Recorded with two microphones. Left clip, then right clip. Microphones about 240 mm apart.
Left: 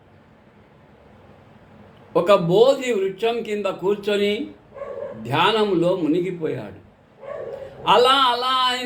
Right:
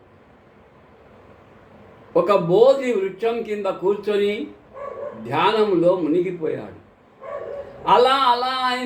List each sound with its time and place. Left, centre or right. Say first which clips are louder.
2.1 s a man's voice: even; centre
7.9 s a man's voice: even; left